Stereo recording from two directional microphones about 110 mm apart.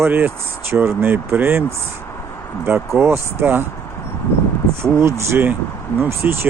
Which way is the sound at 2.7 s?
25° right (ahead or behind).